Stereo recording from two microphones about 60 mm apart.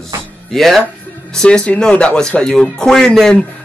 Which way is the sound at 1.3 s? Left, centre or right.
Centre.